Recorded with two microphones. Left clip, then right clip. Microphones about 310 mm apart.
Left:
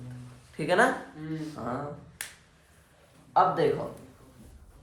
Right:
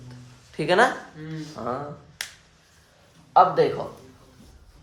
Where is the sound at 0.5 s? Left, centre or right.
Right.